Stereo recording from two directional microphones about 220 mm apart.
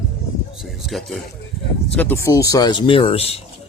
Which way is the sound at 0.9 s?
Centre (ahead or behind).